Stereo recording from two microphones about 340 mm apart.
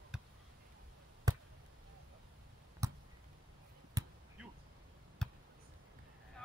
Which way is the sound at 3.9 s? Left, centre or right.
Centre.